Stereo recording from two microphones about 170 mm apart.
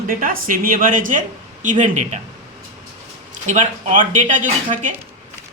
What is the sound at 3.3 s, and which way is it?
Speech, 45° right (ahead or behind).